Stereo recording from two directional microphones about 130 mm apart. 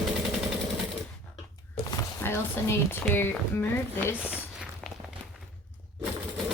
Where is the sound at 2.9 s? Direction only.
15° left (ahead or behind).